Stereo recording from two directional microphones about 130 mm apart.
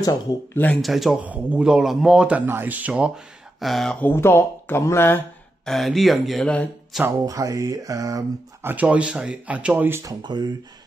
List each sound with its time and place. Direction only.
0.0 s speech: 30° left (ahead or behind)
0.7 s speech: centre (ahead or behind)
3.5 s speech: centre (ahead or behind); by 5.2 s 20° left (ahead or behind)
5.7 s speech: centre (ahead or behind)
6.9 s speech: 5° right (ahead or behind)
7.2 s speech: 25° right (ahead or behind)
8.7 s speech: 10° right (ahead or behind)
10.2 s speech: 35° right (ahead or behind)